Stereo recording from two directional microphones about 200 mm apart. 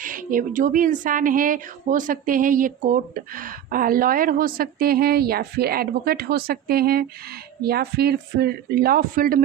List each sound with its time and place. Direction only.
0.0 s speech: 45° right (ahead or behind)